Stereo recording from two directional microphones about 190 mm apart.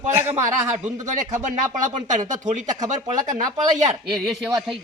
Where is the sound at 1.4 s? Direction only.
40° right (ahead or behind).